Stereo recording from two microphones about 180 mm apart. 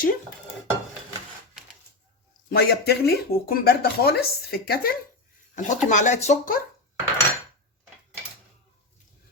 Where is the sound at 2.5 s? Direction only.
65° left (ahead or behind).